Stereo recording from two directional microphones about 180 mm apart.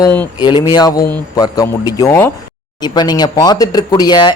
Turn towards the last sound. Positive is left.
turn(degrees=25)  # may be behind; listen again after turning